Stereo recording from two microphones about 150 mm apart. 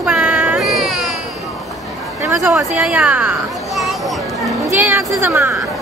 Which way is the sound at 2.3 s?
5° right (ahead or behind).